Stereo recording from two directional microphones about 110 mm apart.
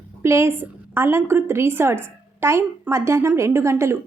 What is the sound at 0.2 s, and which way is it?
A woman's voice, 25° right (ahead or behind).